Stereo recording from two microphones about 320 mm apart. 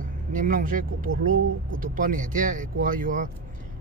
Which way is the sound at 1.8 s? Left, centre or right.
Right.